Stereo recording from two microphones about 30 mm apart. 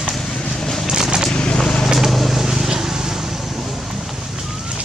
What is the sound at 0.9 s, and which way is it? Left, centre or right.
Vehicle, right.